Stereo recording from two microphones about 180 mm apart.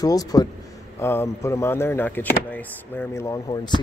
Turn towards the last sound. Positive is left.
turn(degrees=25)  # may be behind; listen again after turning